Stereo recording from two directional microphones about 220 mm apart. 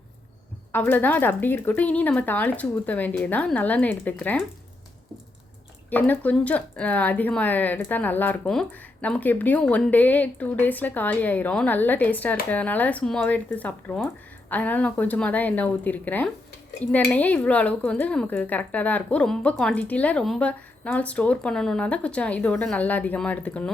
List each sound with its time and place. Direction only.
0.7 s speech: 10° left (ahead or behind)
5.9 s speech: 5° left (ahead or behind)